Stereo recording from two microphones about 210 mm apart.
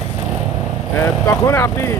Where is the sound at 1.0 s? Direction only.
15° left (ahead or behind).